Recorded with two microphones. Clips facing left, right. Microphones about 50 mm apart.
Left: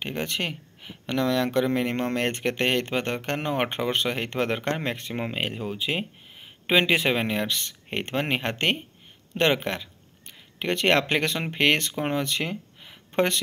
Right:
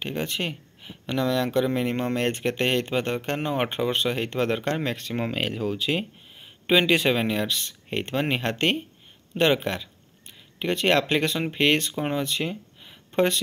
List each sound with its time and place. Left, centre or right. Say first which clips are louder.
0.0 s speech: even; left
4.6 s speech: right 1 dB; left
5.1 s speech: right 2 dB; centre
6.3 s speech: right 1 dB; left